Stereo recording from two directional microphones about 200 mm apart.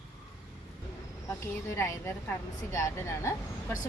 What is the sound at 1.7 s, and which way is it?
A woman's voice, 15° left (ahead or behind).